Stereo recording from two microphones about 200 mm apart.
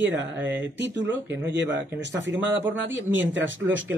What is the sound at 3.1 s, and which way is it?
Speech, 10° right (ahead or behind).